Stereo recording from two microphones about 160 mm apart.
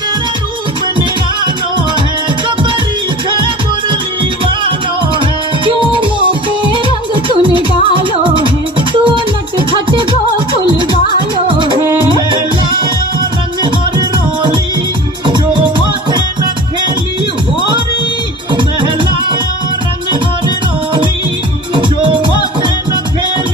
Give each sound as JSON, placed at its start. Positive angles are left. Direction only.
{"t": 5.7, "sound": "music", "side_deg": -30}
{"t": 11.4, "sound": "music", "side_deg": -30}
{"t": 13.7, "sound": "music", "side_deg": -30}
{"t": 21.7, "sound": "music", "side_deg": -30}